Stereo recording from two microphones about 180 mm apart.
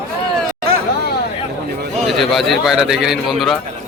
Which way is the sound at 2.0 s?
Centre (ahead or behind).